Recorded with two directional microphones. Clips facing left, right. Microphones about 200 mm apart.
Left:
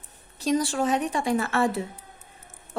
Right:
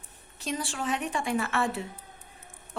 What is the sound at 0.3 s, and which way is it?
A woman's voice, 40° left (ahead or behind).